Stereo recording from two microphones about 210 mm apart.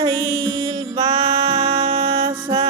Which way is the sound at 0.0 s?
20° right (ahead or behind).